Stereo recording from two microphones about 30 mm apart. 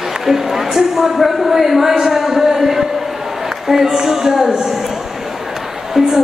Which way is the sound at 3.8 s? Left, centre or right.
Centre.